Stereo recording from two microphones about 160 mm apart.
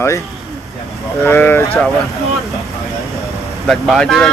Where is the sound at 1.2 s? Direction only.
10° left (ahead or behind).